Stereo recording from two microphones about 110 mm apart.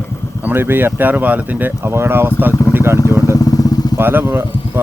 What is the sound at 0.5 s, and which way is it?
Speech, 20° right (ahead or behind).